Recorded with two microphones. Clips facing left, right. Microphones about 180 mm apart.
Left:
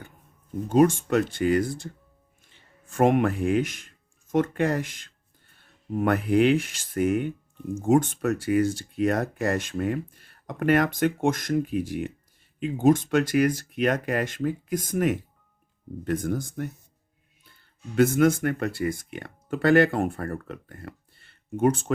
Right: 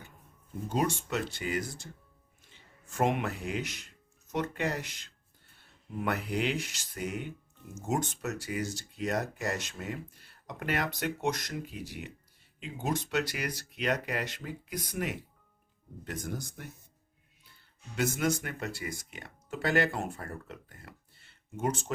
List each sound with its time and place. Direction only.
0.7 s speech: 50° left (ahead or behind)
3.0 s speech: 50° left (ahead or behind)
17.9 s speech: 55° left (ahead or behind)